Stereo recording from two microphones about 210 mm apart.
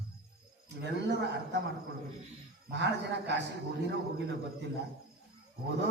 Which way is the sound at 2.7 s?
55° right (ahead or behind).